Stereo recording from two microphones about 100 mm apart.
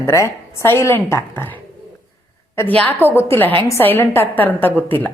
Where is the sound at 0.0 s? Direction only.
30° left (ahead or behind).